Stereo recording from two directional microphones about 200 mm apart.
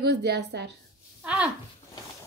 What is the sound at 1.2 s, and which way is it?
Speech, 5° right (ahead or behind).